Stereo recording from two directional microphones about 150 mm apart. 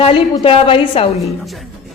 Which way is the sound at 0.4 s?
40° left (ahead or behind).